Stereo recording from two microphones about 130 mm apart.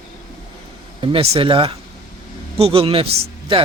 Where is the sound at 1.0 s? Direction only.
45° right (ahead or behind).